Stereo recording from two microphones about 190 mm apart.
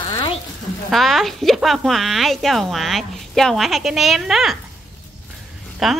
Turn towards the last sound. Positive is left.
turn(degrees=0)  # may be behind; listen again after turning